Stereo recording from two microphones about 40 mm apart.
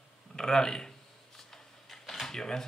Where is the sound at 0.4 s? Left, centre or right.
Centre.